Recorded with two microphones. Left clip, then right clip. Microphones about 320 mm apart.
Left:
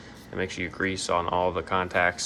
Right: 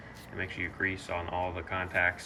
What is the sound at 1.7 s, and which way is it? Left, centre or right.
Speech, left.